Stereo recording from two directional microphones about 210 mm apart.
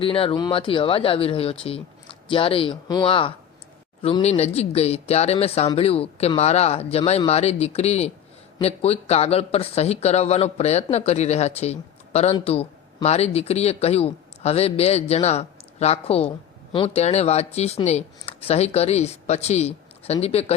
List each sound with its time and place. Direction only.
0.0 s speech: 25° left (ahead or behind)